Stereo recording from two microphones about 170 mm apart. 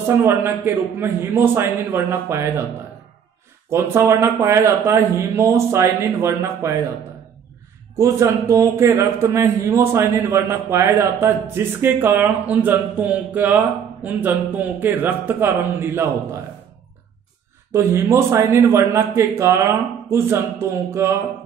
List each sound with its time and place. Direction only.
0.0 s a man's voice: 15° right (ahead or behind)
3.7 s a man's voice: 15° right (ahead or behind)
8.0 s a man's voice: 15° right (ahead or behind)
17.6 s a man's voice: 15° right (ahead or behind)